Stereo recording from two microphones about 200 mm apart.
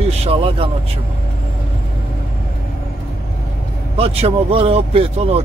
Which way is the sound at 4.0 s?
30° right (ahead or behind).